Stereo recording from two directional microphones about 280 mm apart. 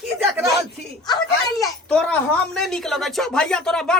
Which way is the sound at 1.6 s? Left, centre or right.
Centre.